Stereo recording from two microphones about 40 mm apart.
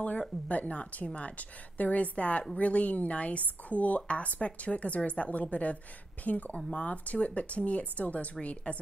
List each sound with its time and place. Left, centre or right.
0.5 s speech: left
6.5 s speech: left